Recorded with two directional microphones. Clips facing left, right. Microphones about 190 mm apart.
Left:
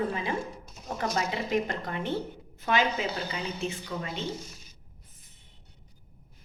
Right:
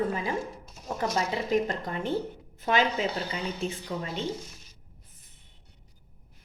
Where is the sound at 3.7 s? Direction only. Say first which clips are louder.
Right 1 dB; 40° right (ahead or behind).